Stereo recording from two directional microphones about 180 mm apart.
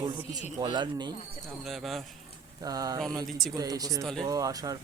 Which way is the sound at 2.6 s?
20° right (ahead or behind).